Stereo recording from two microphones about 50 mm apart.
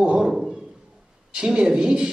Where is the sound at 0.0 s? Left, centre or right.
Centre.